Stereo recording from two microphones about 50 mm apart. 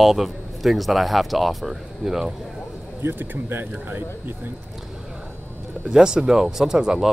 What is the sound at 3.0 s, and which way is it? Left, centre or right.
Speech, right.